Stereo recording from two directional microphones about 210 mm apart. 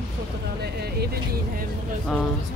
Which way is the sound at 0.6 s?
50° right (ahead or behind).